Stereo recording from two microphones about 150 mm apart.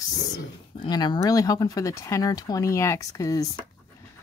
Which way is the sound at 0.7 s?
30° left (ahead or behind).